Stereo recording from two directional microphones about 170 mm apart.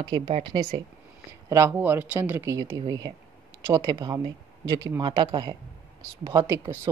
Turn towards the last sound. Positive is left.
turn(degrees=-20)  # may be behind; listen again after turning